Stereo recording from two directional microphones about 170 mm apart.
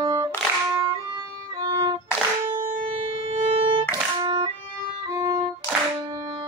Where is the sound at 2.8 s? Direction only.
30° right (ahead or behind).